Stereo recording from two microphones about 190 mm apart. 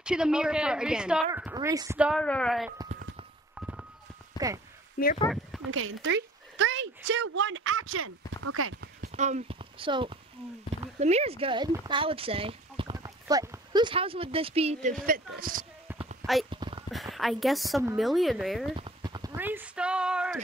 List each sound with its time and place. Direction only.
0.0 s a woman's voice: 5° right (ahead or behind)
1.5 s a woman's voice: 15° right (ahead or behind)
2.0 s a woman's voice: 5° right (ahead or behind)
3.5 s walk: 5° right (ahead or behind)
4.4 s a sound: 20° left (ahead or behind)
5.7 s a woman's voice: 90° right
9.1 s speech: 35° right (ahead or behind)
12.9 s speech: 20° right (ahead or behind); by 15.6 s 50° right (ahead or behind)
15.9 s a sound: 10° right (ahead or behind)
16.4 s a sound: 25° right (ahead or behind)
16.9 s a woman's voice: centre (ahead or behind)
18.8 s horse: 25° right (ahead or behind)
19.3 s a sound: 10° right (ahead or behind)